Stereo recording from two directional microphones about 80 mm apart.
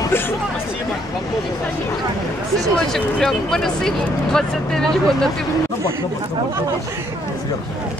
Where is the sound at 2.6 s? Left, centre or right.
Centre.